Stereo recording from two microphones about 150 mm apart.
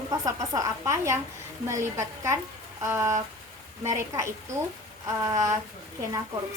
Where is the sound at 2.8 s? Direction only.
20° right (ahead or behind).